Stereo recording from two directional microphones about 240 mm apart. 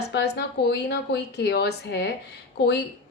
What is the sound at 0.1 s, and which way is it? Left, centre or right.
A woman's voice, left.